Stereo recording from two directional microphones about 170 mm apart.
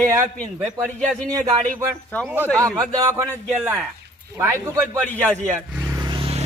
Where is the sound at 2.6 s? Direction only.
20° right (ahead or behind).